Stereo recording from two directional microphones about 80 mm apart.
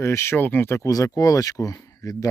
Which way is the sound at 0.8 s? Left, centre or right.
Left.